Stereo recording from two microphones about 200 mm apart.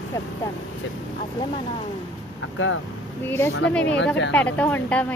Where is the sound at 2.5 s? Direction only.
75° left (ahead or behind).